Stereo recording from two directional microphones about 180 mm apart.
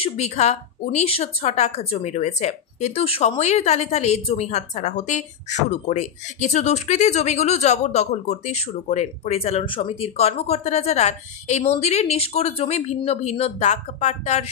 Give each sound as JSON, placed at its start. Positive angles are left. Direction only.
{"t": 0.0, "sound": "a woman's voice", "side_deg": 40}